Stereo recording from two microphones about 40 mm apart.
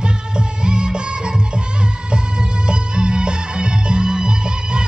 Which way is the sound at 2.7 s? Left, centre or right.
Right.